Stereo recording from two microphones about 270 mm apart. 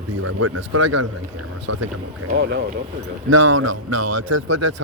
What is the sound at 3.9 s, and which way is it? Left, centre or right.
Speech, right.